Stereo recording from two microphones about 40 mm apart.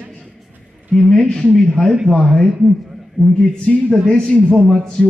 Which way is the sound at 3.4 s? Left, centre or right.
Left.